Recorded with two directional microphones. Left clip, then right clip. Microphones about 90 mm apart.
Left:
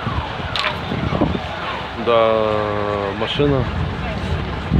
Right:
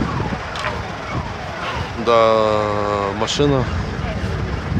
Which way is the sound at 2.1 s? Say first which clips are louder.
Right 2 dB; 35° right (ahead or behind).